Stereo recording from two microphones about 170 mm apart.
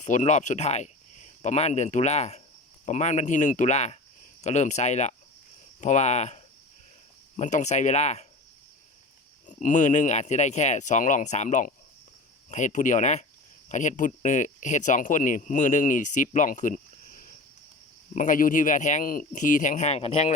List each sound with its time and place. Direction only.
0.0 s speech: 45° left (ahead or behind)
9.5 s speech: 45° left (ahead or behind)
18.1 s speech: 50° left (ahead or behind)